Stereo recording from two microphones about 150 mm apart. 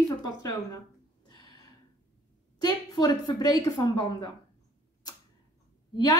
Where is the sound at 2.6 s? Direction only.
30° left (ahead or behind).